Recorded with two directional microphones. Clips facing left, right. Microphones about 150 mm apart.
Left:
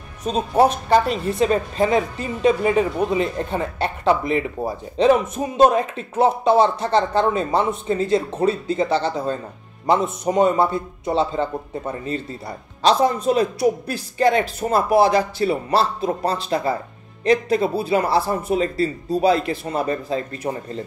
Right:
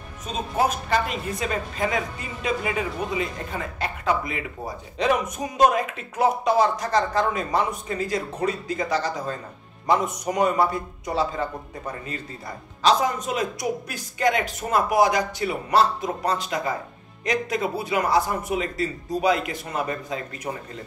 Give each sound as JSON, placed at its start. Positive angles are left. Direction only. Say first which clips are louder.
{"t": 0.2, "sound": "speech", "louder": "left 7 dB", "side_deg": 35}